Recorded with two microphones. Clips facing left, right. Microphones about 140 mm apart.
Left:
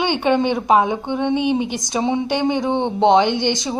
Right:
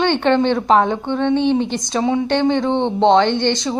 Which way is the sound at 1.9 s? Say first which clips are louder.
Right 2 dB; 20° left (ahead or behind).